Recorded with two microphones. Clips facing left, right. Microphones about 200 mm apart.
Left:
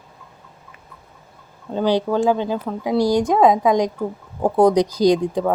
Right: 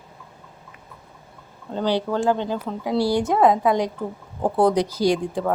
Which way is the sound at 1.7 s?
10° left (ahead or behind).